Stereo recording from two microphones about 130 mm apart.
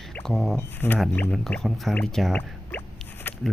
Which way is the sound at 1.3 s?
5° left (ahead or behind).